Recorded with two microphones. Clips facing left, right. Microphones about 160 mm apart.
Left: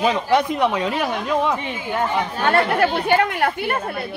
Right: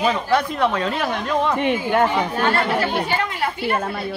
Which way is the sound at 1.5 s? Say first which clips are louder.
Right 6 dB; 65° right (ahead or behind).